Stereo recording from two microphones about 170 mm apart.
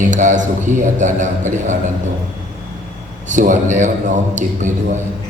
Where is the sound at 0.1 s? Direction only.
45° right (ahead or behind).